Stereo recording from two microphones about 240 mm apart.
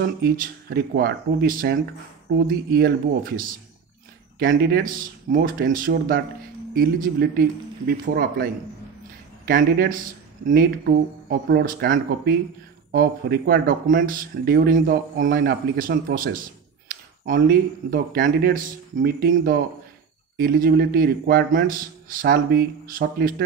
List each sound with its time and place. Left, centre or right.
0.0 s a man's voice: right
4.5 s a man's voice: right
9.5 s a man's voice: right
11.2 s a man's voice: right